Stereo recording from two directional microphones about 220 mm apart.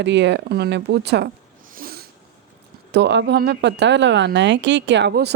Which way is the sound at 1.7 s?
40° right (ahead or behind).